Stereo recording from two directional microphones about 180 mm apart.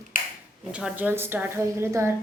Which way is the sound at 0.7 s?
10° right (ahead or behind).